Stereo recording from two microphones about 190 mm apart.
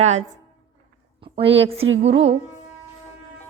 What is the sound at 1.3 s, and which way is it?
Speech, 30° right (ahead or behind).